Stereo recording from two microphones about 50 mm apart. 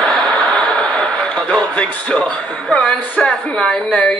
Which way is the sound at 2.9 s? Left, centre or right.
Left.